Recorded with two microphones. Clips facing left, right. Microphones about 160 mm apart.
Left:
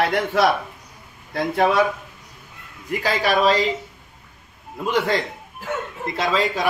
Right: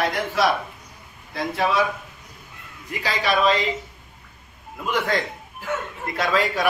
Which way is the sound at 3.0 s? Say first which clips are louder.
Left 2 dB; 40° left (ahead or behind).